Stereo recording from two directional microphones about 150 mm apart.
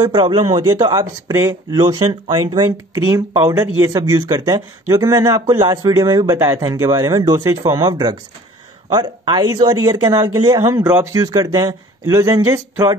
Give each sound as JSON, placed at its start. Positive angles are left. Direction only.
{"t": 0.0, "sound": "speech", "side_deg": -30}
{"t": 0.7, "sound": "speech", "side_deg": -25}